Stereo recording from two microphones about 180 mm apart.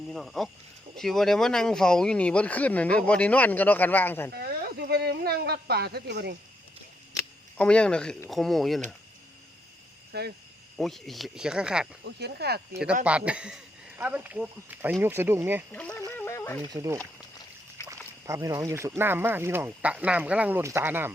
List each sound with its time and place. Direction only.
0.1 s speech: centre (ahead or behind)
4.4 s speech: 60° right (ahead or behind)
7.6 s speech: 5° left (ahead or behind)
10.1 s speech: 65° right (ahead or behind)
10.8 s speech: centre (ahead or behind)
12.0 s speech: 65° right (ahead or behind)
13.1 s speech: 5° right (ahead or behind)
15.7 s speech: 5° left (ahead or behind)
16.0 s a sound: 15° left (ahead or behind)
16.7 s speech: 15° right (ahead or behind)